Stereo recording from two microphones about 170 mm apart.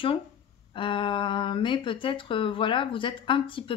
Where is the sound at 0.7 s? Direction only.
30° left (ahead or behind).